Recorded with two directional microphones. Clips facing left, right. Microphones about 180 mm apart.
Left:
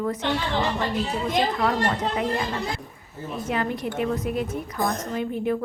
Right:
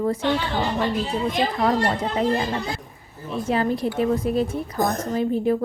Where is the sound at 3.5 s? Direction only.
30° right (ahead or behind).